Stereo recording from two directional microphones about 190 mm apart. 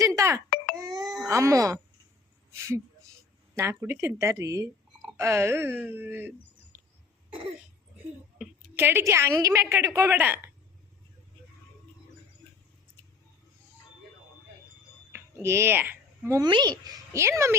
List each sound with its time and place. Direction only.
0.2 s a sound: 15° right (ahead or behind)
0.5 s baby cry: 50° left (ahead or behind)
1.0 s baby cry: centre (ahead or behind)
1.3 s speech: 15° right (ahead or behind)
3.5 s speech: 15° right (ahead or behind)
6.7 s cough: 10° right (ahead or behind)
8.4 s a woman's voice: 10° right (ahead or behind)
15.1 s speech: 15° right (ahead or behind)